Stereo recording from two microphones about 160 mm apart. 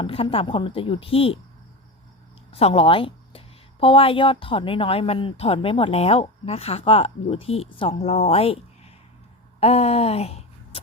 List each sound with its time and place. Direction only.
0.0 s a woman's voice: 35° left (ahead or behind)
2.5 s a woman's voice: 40° left (ahead or behind)
9.6 s a sound: 40° left (ahead or behind)